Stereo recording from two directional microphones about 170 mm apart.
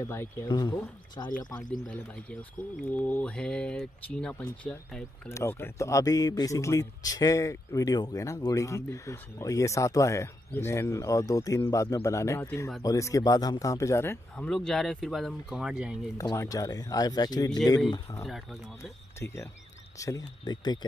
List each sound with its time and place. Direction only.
0.0 s speech: 15° left (ahead or behind)
3.0 s speech: 5° left (ahead or behind)
5.3 s speech: 15° left (ahead or behind)
14.3 s speech: 5° left (ahead or behind)
16.2 s speech: 20° left (ahead or behind)
18.2 s speech: centre (ahead or behind)
20.0 s speech: 20° left (ahead or behind)